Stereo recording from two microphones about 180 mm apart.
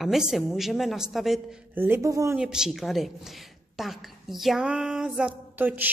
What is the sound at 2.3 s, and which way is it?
A woman's voice, 5° right (ahead or behind).